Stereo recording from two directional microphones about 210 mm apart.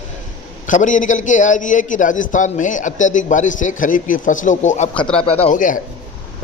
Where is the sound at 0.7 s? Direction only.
35° left (ahead or behind).